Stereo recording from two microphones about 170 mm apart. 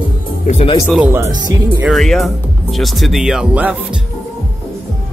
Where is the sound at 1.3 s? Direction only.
25° right (ahead or behind).